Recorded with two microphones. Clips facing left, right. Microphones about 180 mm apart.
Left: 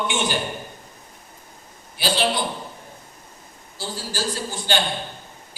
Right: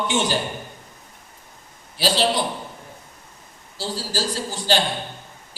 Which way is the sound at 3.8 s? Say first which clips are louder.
Right 3 dB; 35° right (ahead or behind).